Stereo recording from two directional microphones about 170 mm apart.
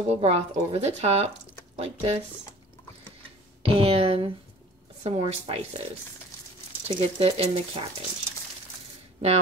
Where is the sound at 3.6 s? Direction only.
35° right (ahead or behind).